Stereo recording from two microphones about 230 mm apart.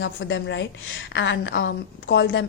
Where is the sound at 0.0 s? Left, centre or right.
Left.